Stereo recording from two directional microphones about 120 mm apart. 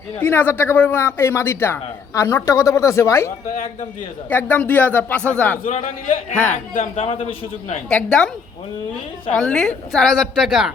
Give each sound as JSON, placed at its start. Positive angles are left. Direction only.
{"t": 0.2, "sound": "speech", "side_deg": 15}
{"t": 5.6, "sound": "a man's voice", "side_deg": 90}
{"t": 6.3, "sound": "speech", "side_deg": 15}
{"t": 6.7, "sound": "a man's voice", "side_deg": 60}
{"t": 7.9, "sound": "speech", "side_deg": 5}
{"t": 9.3, "sound": "a woman's voice", "side_deg": 5}